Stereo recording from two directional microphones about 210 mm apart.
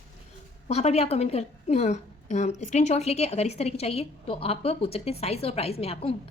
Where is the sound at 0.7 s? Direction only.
30° left (ahead or behind).